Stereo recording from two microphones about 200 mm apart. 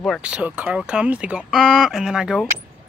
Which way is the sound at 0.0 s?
Centre (ahead or behind).